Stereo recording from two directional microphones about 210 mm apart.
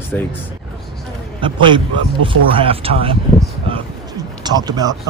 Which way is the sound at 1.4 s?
25° right (ahead or behind).